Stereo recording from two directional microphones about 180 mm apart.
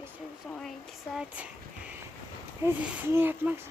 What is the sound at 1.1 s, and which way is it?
Speech, 5° right (ahead or behind).